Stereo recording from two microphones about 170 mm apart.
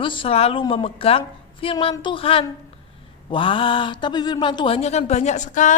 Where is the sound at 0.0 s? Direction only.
30° left (ahead or behind).